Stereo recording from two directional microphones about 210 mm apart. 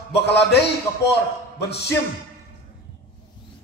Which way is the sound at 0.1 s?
55° left (ahead or behind).